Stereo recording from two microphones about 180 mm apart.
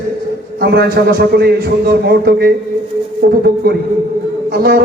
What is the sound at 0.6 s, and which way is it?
A man's voice, 65° right (ahead or behind).